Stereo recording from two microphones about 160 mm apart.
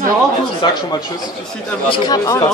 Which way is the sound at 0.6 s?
30° left (ahead or behind).